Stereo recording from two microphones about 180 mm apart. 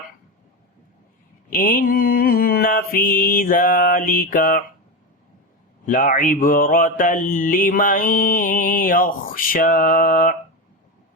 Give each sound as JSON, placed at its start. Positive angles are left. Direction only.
{"t": 1.5, "sound": "mantra", "side_deg": 50}
{"t": 5.8, "sound": "mantra", "side_deg": 45}